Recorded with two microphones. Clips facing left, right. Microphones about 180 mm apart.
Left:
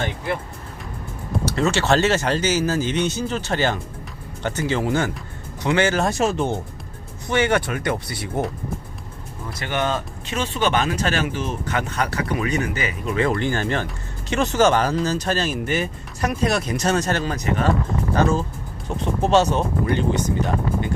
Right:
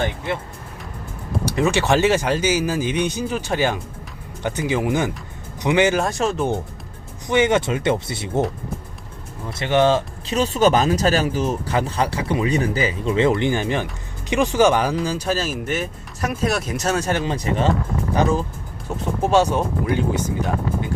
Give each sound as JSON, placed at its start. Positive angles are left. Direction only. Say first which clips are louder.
{"t": 1.5, "sound": "speech", "louder": "right 1 dB", "side_deg": -15}
{"t": 6.0, "sound": "speech", "louder": "left 1 dB", "side_deg": 0}
{"t": 7.3, "sound": "speech", "louder": "right 3 dB", "side_deg": -20}
{"t": 9.5, "sound": "speech", "louder": "right 7 dB", "side_deg": -25}
{"t": 17.3, "sound": "speech", "louder": "right 1 dB", "side_deg": -30}
{"t": 18.1, "sound": "speech", "louder": "right 1 dB", "side_deg": -15}